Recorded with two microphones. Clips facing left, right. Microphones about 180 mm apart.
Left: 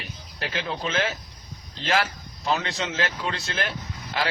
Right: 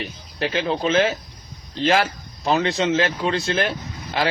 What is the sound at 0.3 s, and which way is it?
Speech, 25° right (ahead or behind).